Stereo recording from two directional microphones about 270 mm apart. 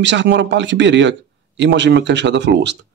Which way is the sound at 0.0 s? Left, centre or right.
Right.